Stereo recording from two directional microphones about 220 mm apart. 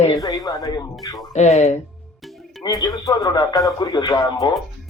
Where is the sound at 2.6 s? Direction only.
15° left (ahead or behind).